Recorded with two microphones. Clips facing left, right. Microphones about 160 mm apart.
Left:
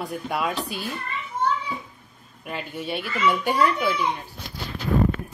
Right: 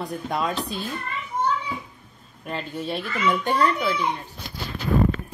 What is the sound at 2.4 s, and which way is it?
A child's voice, 5° left (ahead or behind).